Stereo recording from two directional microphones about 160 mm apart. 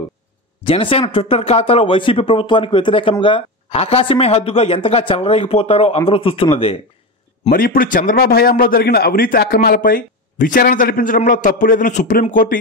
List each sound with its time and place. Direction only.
0.7 s speech: 35° left (ahead or behind)
7.4 s a man's voice: 65° left (ahead or behind)